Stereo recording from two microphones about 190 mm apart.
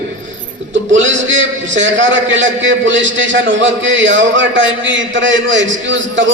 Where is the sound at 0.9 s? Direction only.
80° right.